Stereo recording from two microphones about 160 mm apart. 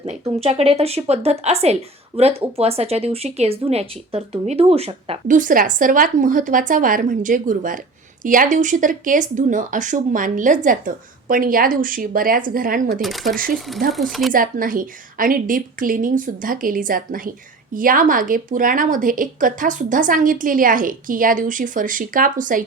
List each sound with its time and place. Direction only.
0.0 s a woman's voice: 40° right (ahead or behind)
5.3 s speech: 55° right (ahead or behind)
13.0 s speech: centre (ahead or behind)
13.3 s speech: 60° right (ahead or behind)
13.9 s speech: centre (ahead or behind)
14.3 s speech: 60° right (ahead or behind)